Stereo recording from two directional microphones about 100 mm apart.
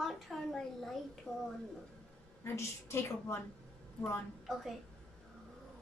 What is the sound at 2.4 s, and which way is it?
Speech, 25° left (ahead or behind).